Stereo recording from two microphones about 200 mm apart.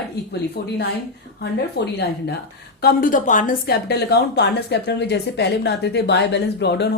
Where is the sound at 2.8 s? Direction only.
50° left (ahead or behind).